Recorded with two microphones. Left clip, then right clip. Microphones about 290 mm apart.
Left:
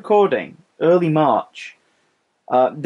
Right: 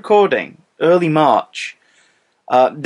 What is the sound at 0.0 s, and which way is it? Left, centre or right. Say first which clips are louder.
Speech: right 3 dB; centre.